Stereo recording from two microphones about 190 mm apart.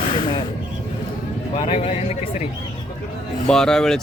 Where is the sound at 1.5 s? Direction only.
30° left (ahead or behind).